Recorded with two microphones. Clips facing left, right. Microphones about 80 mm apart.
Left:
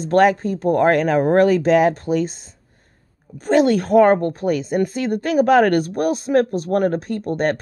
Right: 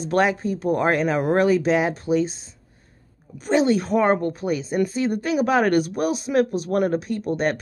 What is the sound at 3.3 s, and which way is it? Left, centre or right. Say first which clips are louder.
Speech: left 4 dB; left.